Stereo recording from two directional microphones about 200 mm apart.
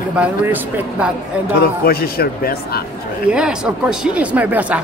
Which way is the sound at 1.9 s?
50° left (ahead or behind).